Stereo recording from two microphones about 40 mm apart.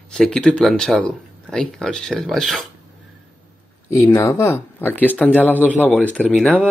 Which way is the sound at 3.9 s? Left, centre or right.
Left.